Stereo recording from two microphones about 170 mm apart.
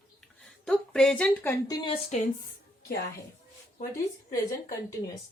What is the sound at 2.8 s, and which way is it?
Speech, 65° left (ahead or behind).